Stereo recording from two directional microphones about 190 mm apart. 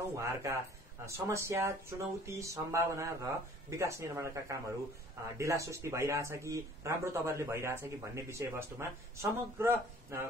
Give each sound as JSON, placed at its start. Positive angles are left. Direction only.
{"t": 0.2, "sound": "speech", "side_deg": -15}